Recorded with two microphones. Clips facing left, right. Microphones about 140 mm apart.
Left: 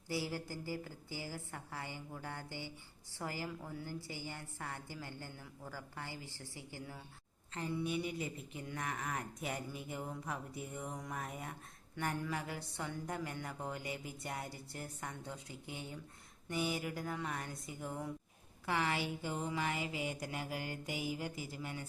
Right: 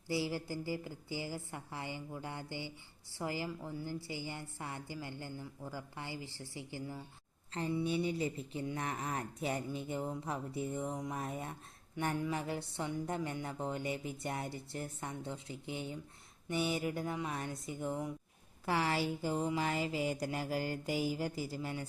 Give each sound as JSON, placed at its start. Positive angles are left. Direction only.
{"t": 0.1, "sound": "a woman's voice", "side_deg": -15}
{"t": 7.9, "sound": "speech", "side_deg": -30}
{"t": 18.6, "sound": "mantra", "side_deg": -35}